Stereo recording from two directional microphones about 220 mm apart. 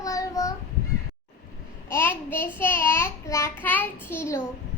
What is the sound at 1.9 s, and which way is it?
Child singing, 10° left (ahead or behind).